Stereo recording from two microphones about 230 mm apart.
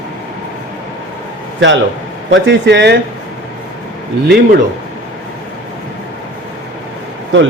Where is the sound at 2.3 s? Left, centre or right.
Right.